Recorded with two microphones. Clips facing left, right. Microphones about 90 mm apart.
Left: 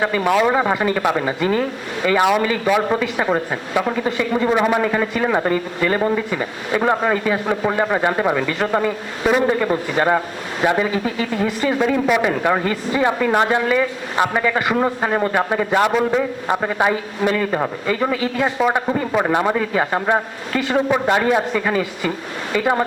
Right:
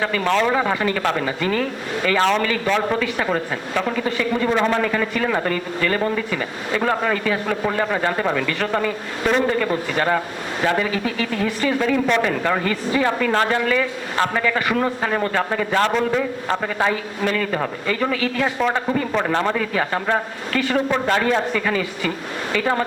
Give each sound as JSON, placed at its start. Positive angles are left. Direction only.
{"t": 0.0, "sound": "speech", "side_deg": 15}